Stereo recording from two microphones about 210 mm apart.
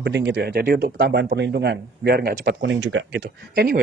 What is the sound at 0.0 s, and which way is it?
Speech, 55° right (ahead or behind).